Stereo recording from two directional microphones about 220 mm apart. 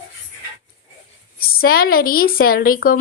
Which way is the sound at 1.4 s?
40° left (ahead or behind).